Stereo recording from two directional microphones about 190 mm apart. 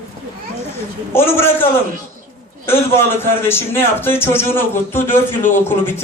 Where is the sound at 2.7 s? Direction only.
10° left (ahead or behind).